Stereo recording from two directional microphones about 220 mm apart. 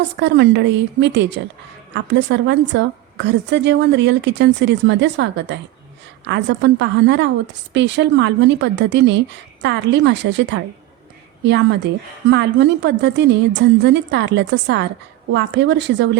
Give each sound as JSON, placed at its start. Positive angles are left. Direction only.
{"t": 0.2, "sound": "a woman's voice", "side_deg": -50}